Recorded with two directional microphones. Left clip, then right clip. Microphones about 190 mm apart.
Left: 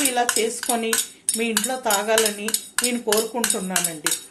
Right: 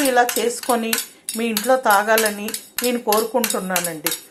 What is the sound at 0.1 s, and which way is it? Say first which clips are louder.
Speech: right 5 dB; 10° right (ahead or behind).